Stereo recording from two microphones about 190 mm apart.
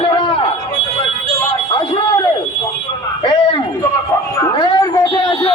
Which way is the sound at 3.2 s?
25° left (ahead or behind).